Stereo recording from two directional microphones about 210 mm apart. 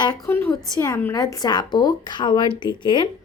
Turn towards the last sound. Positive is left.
turn(degrees=20)  # may be behind; listen again after turning